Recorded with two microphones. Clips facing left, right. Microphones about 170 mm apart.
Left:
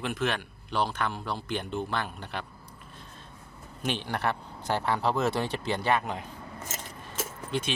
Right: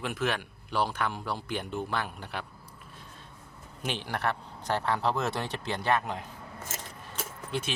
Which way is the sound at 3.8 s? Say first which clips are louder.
Left 2 dB; 5° right (ahead or behind).